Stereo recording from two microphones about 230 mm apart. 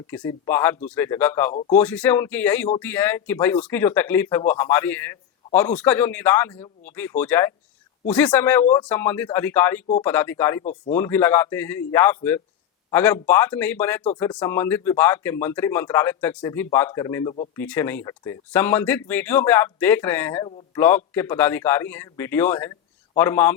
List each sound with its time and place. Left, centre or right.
0.1 s speech: centre
10.6 s speech: left
10.9 s speech: centre